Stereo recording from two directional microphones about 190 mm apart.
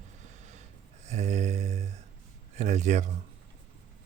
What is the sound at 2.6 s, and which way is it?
Speech, 40° right (ahead or behind).